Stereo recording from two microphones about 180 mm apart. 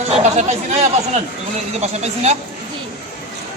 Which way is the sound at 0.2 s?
40° right (ahead or behind).